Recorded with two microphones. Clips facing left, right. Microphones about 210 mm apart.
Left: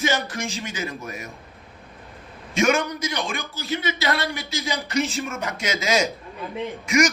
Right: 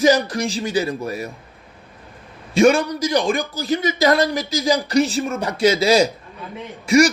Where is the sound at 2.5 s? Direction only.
30° right (ahead or behind).